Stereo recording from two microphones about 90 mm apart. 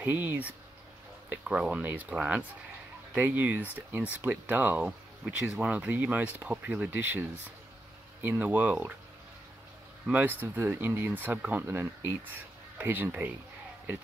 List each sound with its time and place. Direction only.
0.0 s speech: 20° right (ahead or behind)
10.1 s speech: 20° right (ahead or behind)